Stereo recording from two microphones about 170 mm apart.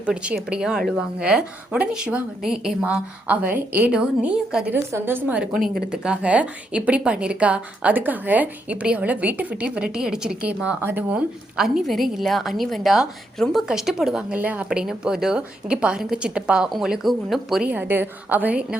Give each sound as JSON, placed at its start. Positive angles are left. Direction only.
{"t": 0.0, "sound": "a woman's voice", "side_deg": -5}
{"t": 5.5, "sound": "a woman's voice", "side_deg": -60}
{"t": 5.9, "sound": "a woman's voice", "side_deg": -5}